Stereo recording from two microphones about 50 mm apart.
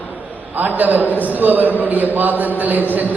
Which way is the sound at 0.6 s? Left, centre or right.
Right.